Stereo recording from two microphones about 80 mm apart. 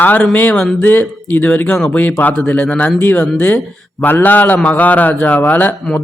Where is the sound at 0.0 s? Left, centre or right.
Left.